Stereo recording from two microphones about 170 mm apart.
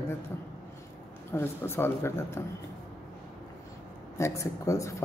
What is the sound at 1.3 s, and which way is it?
Speech, 15° left (ahead or behind).